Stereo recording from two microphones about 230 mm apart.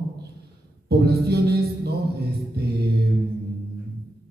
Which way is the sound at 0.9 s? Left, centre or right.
Right.